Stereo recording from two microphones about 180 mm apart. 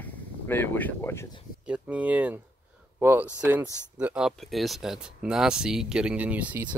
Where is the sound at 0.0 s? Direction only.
10° left (ahead or behind).